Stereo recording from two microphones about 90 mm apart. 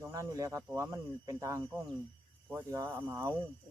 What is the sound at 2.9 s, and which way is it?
Speech, 25° right (ahead or behind).